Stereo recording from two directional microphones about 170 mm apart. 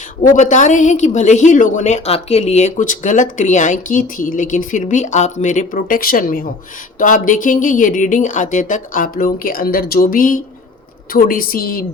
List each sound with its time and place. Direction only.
0.2 s a woman's voice: 45° left (ahead or behind)